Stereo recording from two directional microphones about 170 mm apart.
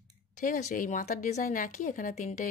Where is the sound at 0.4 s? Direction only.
50° left (ahead or behind).